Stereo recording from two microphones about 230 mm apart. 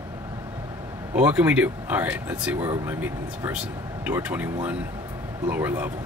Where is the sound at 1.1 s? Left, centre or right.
Centre.